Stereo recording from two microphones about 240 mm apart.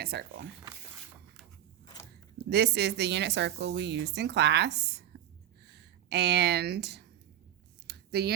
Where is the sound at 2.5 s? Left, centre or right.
Right.